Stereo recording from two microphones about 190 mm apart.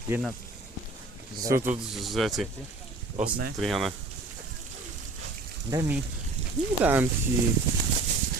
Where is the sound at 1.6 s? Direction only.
Centre (ahead or behind).